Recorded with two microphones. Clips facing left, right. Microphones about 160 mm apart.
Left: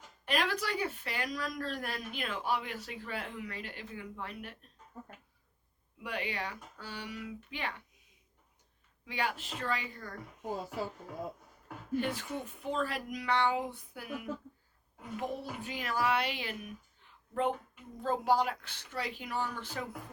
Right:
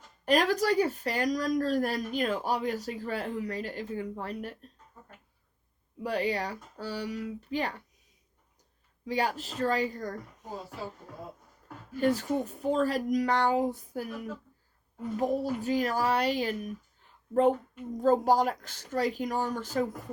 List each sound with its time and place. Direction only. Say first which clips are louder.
0.3 s speech: right 8 dB; 40° right (ahead or behind)
6.0 s speech: right 8 dB; 35° right (ahead or behind)
9.0 s speech: right 6 dB; 40° right (ahead or behind)
11.9 s speech: right 8 dB; 40° right (ahead or behind)